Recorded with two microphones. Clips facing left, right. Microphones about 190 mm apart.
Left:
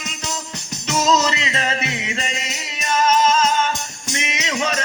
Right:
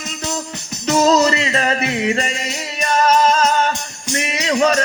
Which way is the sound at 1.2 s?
45° right (ahead or behind).